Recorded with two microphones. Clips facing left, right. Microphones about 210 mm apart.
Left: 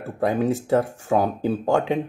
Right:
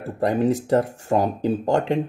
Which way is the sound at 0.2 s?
Centre (ahead or behind).